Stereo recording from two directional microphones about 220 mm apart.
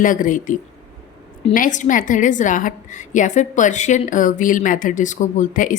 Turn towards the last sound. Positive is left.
turn(degrees=35)  # may be behind; listen again after turning